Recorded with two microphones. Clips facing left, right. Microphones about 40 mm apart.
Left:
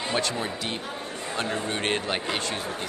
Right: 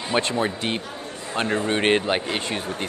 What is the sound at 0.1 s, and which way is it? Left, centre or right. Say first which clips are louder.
Speech: right 7 dB; right.